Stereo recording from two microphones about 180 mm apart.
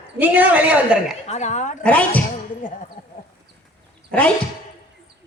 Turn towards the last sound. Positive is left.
turn(degrees=10)  # may be behind; listen again after turning